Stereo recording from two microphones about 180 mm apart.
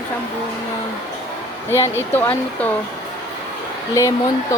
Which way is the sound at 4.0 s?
15° left (ahead or behind).